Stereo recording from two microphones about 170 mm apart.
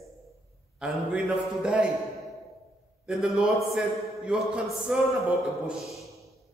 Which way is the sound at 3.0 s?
5° right (ahead or behind).